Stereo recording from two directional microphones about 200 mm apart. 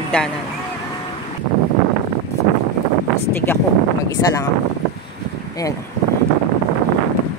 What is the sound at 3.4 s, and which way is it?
Speech, 15° left (ahead or behind).